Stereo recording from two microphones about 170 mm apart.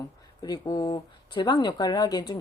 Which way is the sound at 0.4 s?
25° left (ahead or behind).